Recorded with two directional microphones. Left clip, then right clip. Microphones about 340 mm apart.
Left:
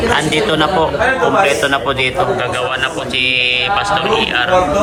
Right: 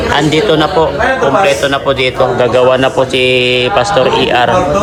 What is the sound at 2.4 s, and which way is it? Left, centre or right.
Speech, right.